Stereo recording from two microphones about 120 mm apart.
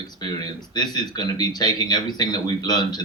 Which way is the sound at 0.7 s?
35° left (ahead or behind).